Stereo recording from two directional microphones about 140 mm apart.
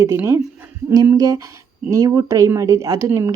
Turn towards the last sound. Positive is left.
turn(degrees=-20)  # may be behind; listen again after turning